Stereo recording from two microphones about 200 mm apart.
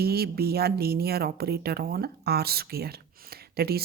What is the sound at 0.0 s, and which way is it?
Speech, 50° right (ahead or behind).